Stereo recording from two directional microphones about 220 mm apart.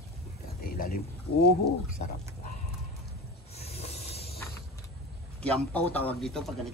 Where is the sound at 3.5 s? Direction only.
30° left (ahead or behind).